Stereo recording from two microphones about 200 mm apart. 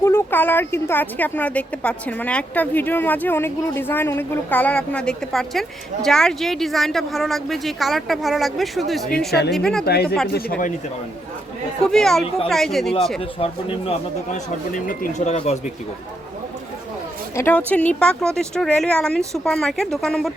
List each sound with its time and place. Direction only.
0.0 s speech: 10° left (ahead or behind)
9.8 s speech: 50° left (ahead or behind)
11.8 s speech: 5° left (ahead or behind)
14.3 s speech: 40° left (ahead or behind)
17.3 s speech: 10° left (ahead or behind)